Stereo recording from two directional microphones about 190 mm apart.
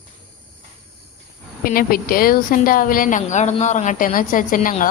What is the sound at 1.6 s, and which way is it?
A woman's voice, 50° left (ahead or behind).